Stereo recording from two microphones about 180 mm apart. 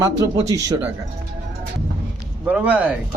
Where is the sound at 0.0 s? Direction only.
20° right (ahead or behind).